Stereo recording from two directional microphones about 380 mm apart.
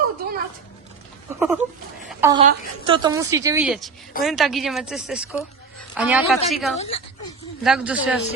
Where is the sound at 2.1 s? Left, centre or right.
Centre.